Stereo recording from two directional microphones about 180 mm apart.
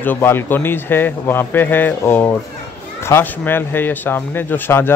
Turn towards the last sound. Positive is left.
turn(degrees=10)  # may be behind; listen again after turning